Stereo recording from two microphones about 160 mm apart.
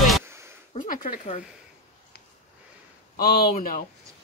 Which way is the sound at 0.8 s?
60° left (ahead or behind).